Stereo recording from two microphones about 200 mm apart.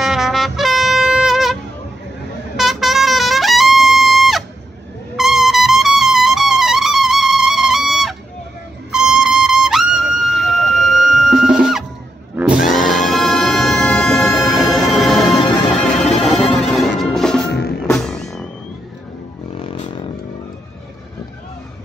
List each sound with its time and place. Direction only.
0.0 s music: centre (ahead or behind)
2.5 s trumpet: centre (ahead or behind)
8.9 s music: 5° right (ahead or behind)
12.5 s music: 40° left (ahead or behind)
12.9 s music: centre (ahead or behind)
17.5 s music: 55° left (ahead or behind)
17.8 s music: 5° left (ahead or behind)
19.5 s a sound: 25° left (ahead or behind)